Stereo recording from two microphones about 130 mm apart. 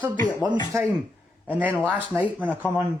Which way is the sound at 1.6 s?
10° right (ahead or behind).